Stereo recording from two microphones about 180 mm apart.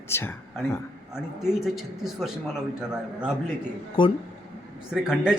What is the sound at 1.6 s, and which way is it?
A man's voice, centre (ahead or behind).